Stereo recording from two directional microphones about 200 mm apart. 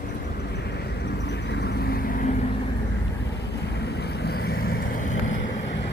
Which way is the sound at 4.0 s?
55° left (ahead or behind).